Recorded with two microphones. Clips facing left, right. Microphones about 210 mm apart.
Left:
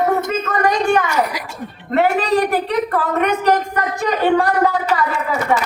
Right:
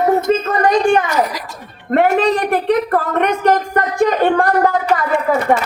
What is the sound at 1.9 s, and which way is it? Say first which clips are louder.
A man's voice: right 3 dB; 50° right (ahead or behind).